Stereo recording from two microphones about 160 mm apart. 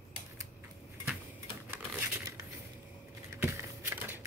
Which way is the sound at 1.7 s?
15° right (ahead or behind).